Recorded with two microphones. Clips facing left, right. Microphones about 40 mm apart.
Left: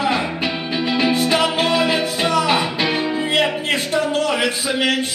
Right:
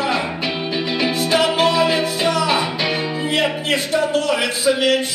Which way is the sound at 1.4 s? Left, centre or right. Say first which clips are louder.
Right 2 dB; left.